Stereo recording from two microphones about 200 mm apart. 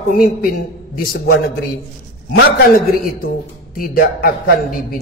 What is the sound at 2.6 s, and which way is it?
A man's voice, 50° left (ahead or behind).